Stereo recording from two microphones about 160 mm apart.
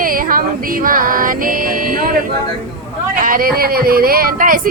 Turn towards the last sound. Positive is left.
turn(degrees=-60)  # may be behind; listen again after turning